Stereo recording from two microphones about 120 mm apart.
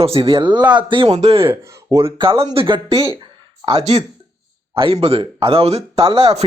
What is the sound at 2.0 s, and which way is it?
Speech, 50° right (ahead or behind).